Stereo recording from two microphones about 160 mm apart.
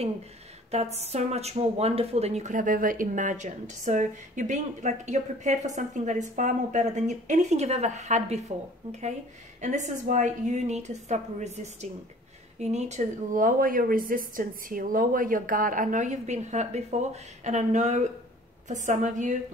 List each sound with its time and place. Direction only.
0.9 s speech: 40° right (ahead or behind)
9.6 s speech: 50° right (ahead or behind)